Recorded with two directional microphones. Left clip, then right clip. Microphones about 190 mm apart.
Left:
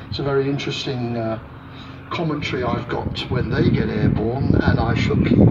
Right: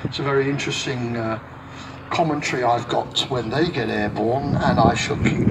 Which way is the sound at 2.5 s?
25° left (ahead or behind).